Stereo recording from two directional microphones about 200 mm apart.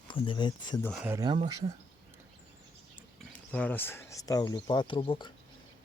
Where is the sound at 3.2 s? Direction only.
5° left (ahead or behind); by 5.3 s 25° left (ahead or behind).